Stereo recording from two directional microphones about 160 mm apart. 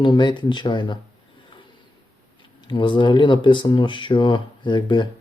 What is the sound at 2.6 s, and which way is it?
Speech, 30° left (ahead or behind).